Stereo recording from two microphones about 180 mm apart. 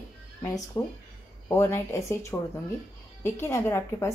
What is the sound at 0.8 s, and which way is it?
A woman's voice, 15° left (ahead or behind).